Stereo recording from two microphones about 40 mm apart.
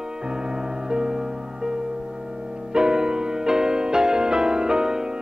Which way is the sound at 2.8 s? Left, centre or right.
Centre.